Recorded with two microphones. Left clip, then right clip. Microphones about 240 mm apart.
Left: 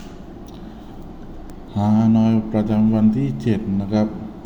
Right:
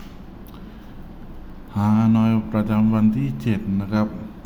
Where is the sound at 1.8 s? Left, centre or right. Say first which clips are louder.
Left 2 dB; centre.